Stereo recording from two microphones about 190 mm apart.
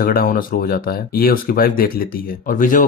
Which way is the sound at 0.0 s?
50° left (ahead or behind).